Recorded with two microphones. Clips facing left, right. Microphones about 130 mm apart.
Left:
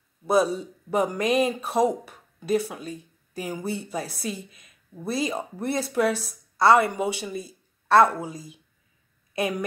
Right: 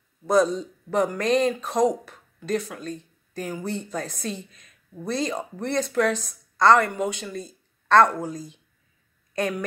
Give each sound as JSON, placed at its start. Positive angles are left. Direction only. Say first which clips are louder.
{"t": 0.3, "sound": "a woman's voice", "louder": "right 1 dB", "side_deg": 10}